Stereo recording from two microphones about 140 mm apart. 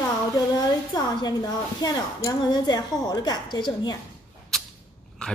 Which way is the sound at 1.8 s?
25° left (ahead or behind).